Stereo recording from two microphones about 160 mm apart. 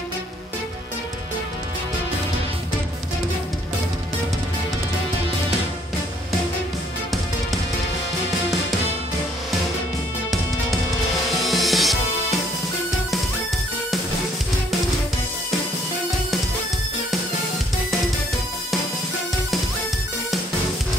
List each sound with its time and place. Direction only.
11.3 s music: centre (ahead or behind)